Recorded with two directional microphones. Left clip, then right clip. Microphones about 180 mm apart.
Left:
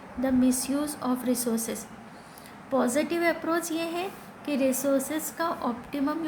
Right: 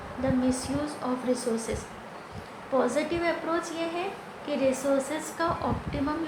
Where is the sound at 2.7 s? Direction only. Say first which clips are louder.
Even; 50° left (ahead or behind).